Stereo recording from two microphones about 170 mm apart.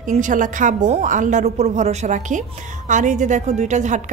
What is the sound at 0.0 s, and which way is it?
A woman's voice, 50° right (ahead or behind).